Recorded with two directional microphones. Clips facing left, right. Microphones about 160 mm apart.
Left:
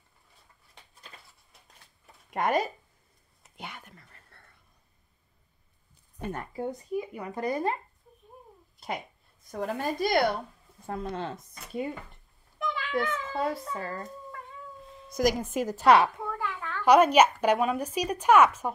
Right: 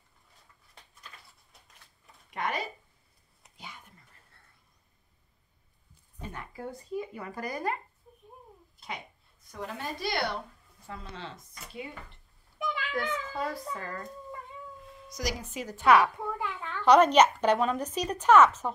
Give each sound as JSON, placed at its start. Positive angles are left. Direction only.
{"t": 2.3, "sound": "a woman's voice", "side_deg": 45}
{"t": 3.5, "sound": "whispering", "side_deg": 70}
{"t": 6.2, "sound": "a woman's voice", "side_deg": 45}
{"t": 6.5, "sound": "speech", "side_deg": 20}
{"t": 8.7, "sound": "a sound", "side_deg": 45}
{"t": 9.5, "sound": "a woman's voice", "side_deg": 45}
{"t": 12.9, "sound": "speech", "side_deg": 25}
{"t": 15.0, "sound": "a woman's voice", "side_deg": 50}
{"t": 16.3, "sound": "a sound", "side_deg": -20}
{"t": 16.8, "sound": "speech", "side_deg": 10}